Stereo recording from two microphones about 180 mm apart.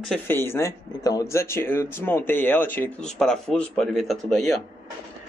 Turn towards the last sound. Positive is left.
turn(degrees=0)  # may be behind; listen again after turning